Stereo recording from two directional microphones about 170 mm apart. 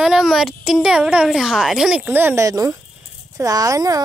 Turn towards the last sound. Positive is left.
turn(degrees=-20)  # may be behind; listen again after turning